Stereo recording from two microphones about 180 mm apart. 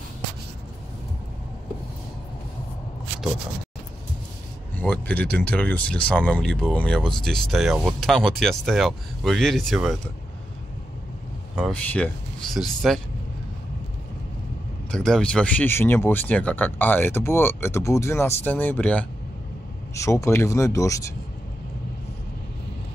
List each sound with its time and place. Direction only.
4.7 s speech: 10° left (ahead or behind)
11.7 s speech: 5° left (ahead or behind)
14.9 s speech: 5° left (ahead or behind)